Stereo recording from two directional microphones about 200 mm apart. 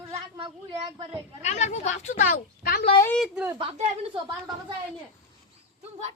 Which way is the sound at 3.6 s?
30° right (ahead or behind).